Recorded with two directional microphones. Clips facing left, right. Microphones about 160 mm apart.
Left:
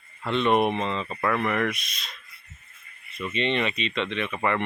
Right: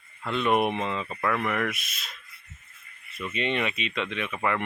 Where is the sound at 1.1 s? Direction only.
Centre (ahead or behind).